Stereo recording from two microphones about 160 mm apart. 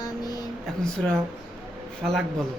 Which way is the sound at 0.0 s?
25° left (ahead or behind).